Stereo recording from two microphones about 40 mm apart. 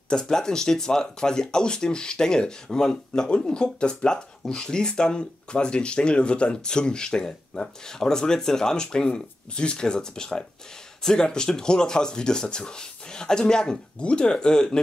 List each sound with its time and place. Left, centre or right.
0.1 s speech: centre